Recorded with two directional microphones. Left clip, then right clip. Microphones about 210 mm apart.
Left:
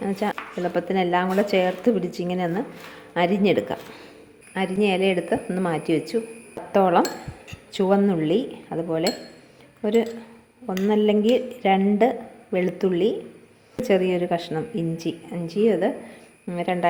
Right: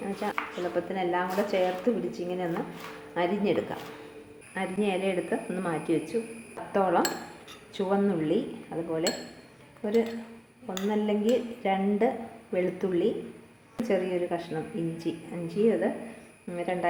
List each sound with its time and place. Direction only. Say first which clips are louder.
0.0 s a woman's voice: left 5 dB; 55° left (ahead or behind)
4.5 s a woman's voice: left 7 dB; 40° left (ahead or behind)